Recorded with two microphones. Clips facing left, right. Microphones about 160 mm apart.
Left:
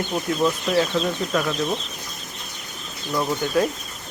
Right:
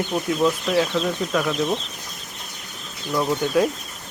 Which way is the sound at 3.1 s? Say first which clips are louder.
Right 2 dB; 5° right (ahead or behind).